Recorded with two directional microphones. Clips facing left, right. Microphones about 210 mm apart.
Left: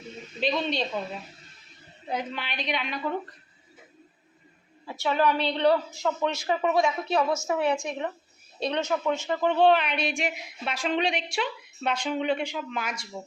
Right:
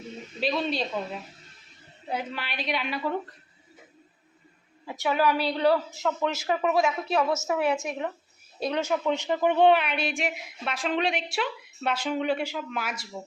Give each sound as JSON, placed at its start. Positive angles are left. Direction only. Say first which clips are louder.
{"t": 0.3, "sound": "a woman's voice", "louder": "even", "side_deg": -5}
{"t": 2.0, "sound": "a woman's voice", "louder": "left 1 dB", "side_deg": -5}
{"t": 4.9, "sound": "a woman's voice", "louder": "right 1 dB", "side_deg": -15}
{"t": 5.1, "sound": "a woman's voice", "louder": "even", "side_deg": -5}